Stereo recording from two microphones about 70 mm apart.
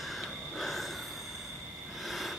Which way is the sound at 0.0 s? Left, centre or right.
Centre.